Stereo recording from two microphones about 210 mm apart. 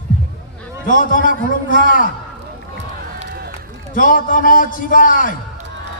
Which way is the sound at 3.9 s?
40° left (ahead or behind).